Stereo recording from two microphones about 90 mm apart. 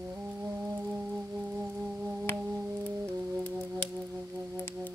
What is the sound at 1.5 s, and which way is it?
Music, 20° right (ahead or behind).